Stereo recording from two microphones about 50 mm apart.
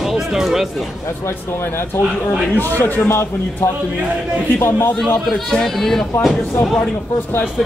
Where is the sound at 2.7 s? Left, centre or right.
Left.